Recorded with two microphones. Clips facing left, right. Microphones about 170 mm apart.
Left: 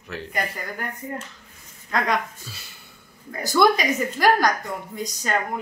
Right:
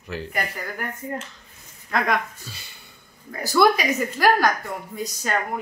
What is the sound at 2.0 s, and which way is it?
Speech, centre (ahead or behind).